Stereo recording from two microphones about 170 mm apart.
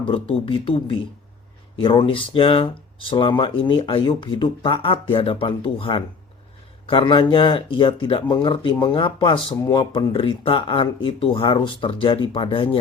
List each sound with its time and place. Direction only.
0.0 s speech: 35° left (ahead or behind)